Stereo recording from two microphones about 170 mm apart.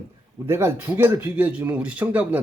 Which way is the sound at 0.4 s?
15° right (ahead or behind).